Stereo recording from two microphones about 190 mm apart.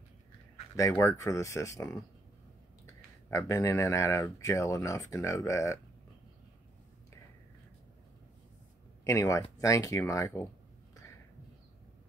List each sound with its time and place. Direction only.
0.7 s speech: 15° left (ahead or behind)
3.3 s speech: 15° left (ahead or behind)
9.0 s speech: 15° left (ahead or behind)